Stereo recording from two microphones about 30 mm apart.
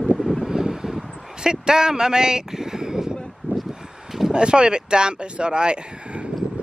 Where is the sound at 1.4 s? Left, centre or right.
Right.